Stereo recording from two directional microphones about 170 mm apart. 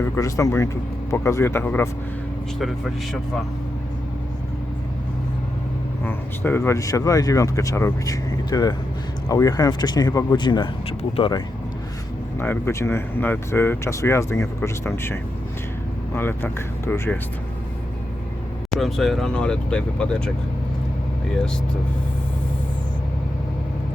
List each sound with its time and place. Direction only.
0.0 s speech: 20° left (ahead or behind)
2.6 s speech: centre (ahead or behind)
6.1 s speech: 10° left (ahead or behind)
12.4 s speech: 15° left (ahead or behind)
18.8 s speech: centre (ahead or behind)